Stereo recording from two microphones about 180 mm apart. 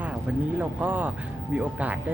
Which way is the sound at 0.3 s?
5° right (ahead or behind).